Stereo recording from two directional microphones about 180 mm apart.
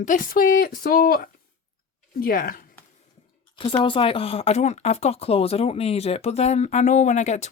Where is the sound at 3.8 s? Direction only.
30° left (ahead or behind).